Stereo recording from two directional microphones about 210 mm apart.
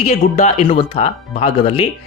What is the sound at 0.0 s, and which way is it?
Speech, 30° left (ahead or behind).